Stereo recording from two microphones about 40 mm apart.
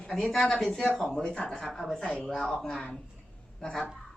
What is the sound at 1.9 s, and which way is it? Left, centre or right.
Speech, left.